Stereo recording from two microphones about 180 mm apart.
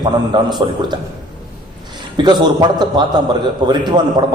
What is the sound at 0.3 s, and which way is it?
Speech, 25° right (ahead or behind).